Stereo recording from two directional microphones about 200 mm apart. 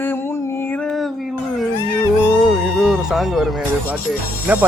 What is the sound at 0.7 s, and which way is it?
Speech, 5° left (ahead or behind).